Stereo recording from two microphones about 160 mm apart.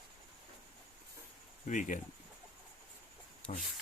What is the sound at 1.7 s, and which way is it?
Speech, 55° left (ahead or behind).